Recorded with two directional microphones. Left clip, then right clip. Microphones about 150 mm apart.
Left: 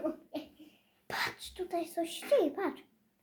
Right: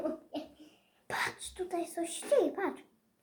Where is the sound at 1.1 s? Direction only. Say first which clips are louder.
Right 1 dB; 30° left (ahead or behind).